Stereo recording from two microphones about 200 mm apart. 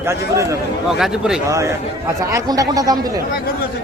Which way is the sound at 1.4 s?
15° right (ahead or behind).